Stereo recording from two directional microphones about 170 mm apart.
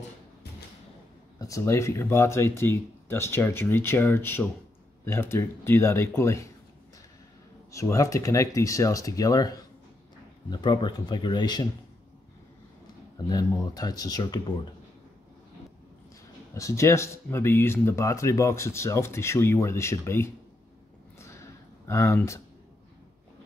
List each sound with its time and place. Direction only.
1.4 s speech: 20° left (ahead or behind)
7.7 s speech: 15° left (ahead or behind)
13.3 s speech: 20° left (ahead or behind)
16.5 s speech: 20° left (ahead or behind)
21.8 s speech: 15° left (ahead or behind)